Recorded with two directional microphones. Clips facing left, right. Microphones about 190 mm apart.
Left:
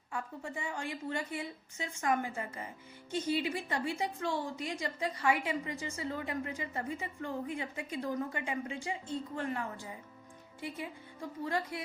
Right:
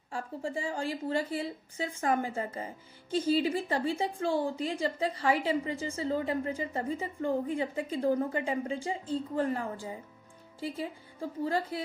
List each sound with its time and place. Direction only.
0.1 s a woman's voice: 30° right (ahead or behind)